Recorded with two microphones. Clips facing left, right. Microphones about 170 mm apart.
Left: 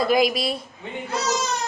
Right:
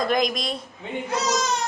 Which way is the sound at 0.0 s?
5° left (ahead or behind).